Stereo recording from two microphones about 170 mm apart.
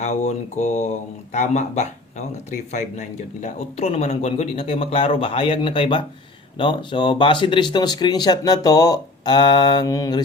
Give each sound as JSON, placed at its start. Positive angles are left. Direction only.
{"t": 0.0, "sound": "mantra", "side_deg": 45}
{"t": 1.3, "sound": "speech", "side_deg": 45}